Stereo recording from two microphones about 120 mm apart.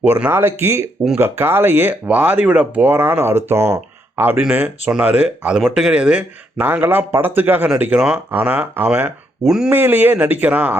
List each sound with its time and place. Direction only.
0.0 s speech: 15° right (ahead or behind)